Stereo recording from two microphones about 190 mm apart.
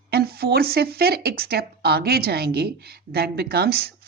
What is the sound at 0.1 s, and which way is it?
A woman's voice, 55° right (ahead or behind).